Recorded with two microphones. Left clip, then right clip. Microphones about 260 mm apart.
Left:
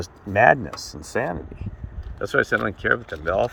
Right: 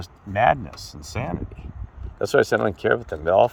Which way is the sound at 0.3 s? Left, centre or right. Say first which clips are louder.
Left 3 dB; right.